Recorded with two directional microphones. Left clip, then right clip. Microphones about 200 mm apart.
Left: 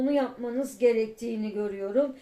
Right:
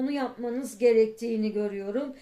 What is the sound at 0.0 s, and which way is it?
Speech, 35° right (ahead or behind).